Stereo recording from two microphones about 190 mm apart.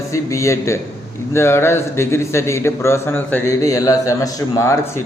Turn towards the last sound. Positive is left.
turn(degrees=15)  # may be behind; listen again after turning